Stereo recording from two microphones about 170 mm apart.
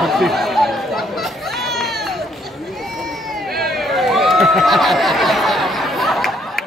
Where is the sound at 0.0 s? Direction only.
Centre (ahead or behind).